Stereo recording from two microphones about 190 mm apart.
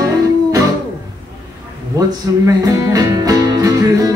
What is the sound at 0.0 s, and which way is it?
Music, 15° right (ahead or behind).